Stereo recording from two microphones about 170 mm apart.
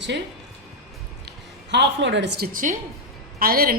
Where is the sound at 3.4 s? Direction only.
60° right (ahead or behind).